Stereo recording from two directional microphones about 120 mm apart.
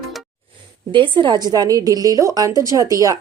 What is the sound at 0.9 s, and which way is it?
A woman's voice, 45° right (ahead or behind).